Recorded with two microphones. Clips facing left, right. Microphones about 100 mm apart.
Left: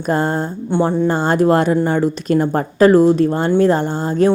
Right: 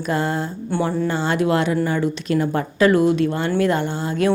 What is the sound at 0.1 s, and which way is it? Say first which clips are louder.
Speech: left 5 dB; 45° left (ahead or behind).